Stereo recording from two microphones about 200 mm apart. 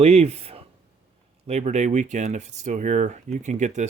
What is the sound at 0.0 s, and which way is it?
Speech, 30° right (ahead or behind).